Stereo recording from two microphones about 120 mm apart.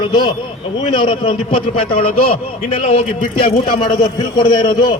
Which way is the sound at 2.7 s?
50° left (ahead or behind).